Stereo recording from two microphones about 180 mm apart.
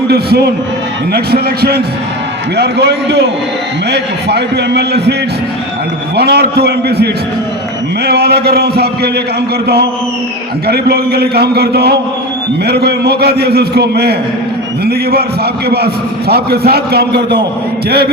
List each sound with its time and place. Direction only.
0.1 s a man's voice: 60° right (ahead or behind)
6.1 s a man's voice: 60° right (ahead or behind)
10.7 s a man's voice: 60° right (ahead or behind)
16.3 s a man's voice: 60° right (ahead or behind)